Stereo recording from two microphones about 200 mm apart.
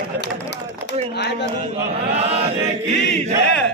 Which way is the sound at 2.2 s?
30° right (ahead or behind).